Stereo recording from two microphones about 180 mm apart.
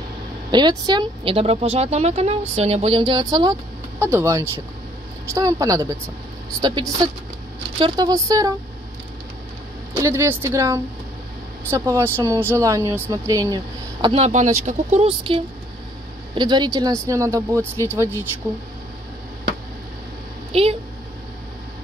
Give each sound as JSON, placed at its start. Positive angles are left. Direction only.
{"t": 0.5, "sound": "a woman's voice", "side_deg": -25}
{"t": 9.9, "sound": "speech", "side_deg": -15}
{"t": 14.0, "sound": "a woman's voice", "side_deg": -35}
{"t": 20.5, "sound": "a woman's voice", "side_deg": -30}